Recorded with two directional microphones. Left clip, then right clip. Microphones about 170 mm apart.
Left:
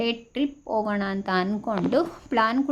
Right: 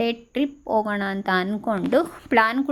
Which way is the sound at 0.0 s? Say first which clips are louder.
Right 2 dB; 25° right (ahead or behind).